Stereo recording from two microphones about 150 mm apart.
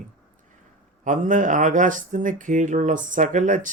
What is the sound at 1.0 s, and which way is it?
Speech, 60° right (ahead or behind).